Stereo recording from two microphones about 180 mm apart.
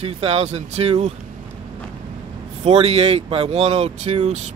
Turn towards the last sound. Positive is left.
turn(degrees=-35)  # may be behind; listen again after turning